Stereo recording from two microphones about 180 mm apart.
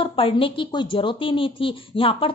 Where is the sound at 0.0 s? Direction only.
30° left (ahead or behind).